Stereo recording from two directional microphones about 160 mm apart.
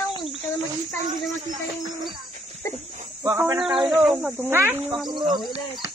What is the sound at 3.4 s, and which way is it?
Speech, 5° right (ahead or behind).